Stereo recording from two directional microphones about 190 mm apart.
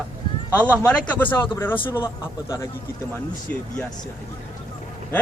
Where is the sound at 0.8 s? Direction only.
10° left (ahead or behind).